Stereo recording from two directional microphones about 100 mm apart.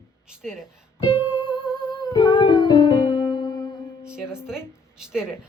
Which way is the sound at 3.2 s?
45° left (ahead or behind).